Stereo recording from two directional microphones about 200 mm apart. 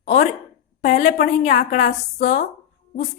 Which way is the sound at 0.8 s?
40° left (ahead or behind).